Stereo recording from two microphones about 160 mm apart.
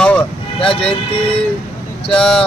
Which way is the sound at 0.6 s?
35° left (ahead or behind).